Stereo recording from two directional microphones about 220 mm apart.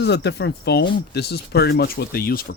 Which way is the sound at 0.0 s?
50° left (ahead or behind).